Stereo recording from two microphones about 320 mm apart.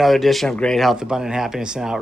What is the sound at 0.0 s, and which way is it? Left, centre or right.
Speech, centre.